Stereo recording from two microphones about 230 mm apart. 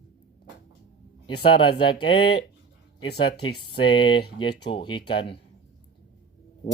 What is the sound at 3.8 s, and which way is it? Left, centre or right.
Speech, left.